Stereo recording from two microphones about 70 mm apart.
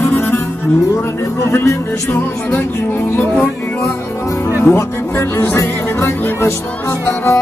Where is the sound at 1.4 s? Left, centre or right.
Left.